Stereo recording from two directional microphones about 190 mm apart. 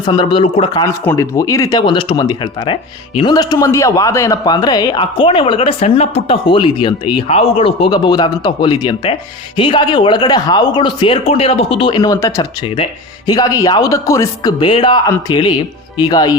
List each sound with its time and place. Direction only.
0.0 s speech: 25° left (ahead or behind)